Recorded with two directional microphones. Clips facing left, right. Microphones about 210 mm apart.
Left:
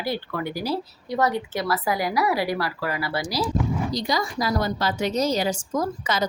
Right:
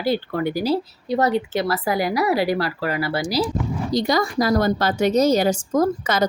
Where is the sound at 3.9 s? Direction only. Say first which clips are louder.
Right 6 dB; 55° right (ahead or behind).